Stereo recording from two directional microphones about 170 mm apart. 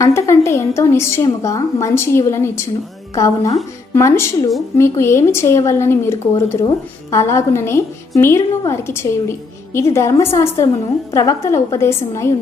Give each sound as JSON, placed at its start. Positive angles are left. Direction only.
{"t": 0.0, "sound": "speech", "side_deg": 15}